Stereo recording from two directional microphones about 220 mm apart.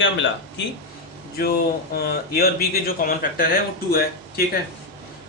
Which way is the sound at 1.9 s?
45° left (ahead or behind).